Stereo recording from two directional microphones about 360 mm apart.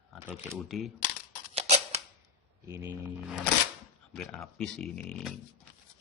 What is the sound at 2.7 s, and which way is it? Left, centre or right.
Speech, centre.